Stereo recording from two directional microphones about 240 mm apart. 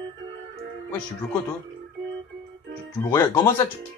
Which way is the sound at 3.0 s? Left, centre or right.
Centre.